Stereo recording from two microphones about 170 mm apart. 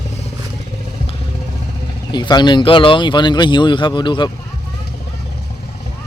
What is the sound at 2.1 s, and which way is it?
Speech, 25° left (ahead or behind).